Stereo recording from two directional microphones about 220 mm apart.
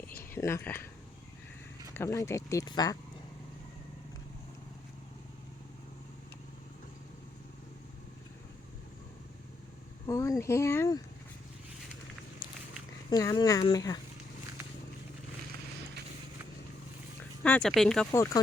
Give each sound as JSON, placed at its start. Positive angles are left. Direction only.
{"t": 0.1, "sound": "speech", "side_deg": 10}
{"t": 1.9, "sound": "speech", "side_deg": 15}
{"t": 10.1, "sound": "speech", "side_deg": 15}
{"t": 13.1, "sound": "speech", "side_deg": 20}
{"t": 17.4, "sound": "speech", "side_deg": 5}